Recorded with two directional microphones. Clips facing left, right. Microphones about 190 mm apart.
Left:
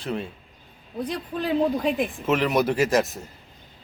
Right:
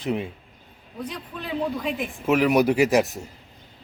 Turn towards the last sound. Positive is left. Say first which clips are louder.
# right 2 dB
turn(degrees=-15)  # may be behind; listen again after turning